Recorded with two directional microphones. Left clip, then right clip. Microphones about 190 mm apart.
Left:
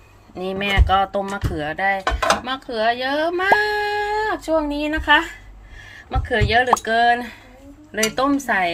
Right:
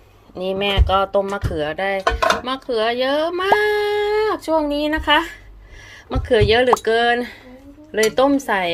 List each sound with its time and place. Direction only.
0.3 s speech: 10° right (ahead or behind)